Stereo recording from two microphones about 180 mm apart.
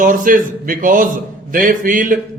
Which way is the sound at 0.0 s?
50° right (ahead or behind).